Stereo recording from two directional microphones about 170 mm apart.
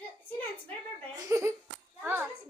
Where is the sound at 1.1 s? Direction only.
15° right (ahead or behind).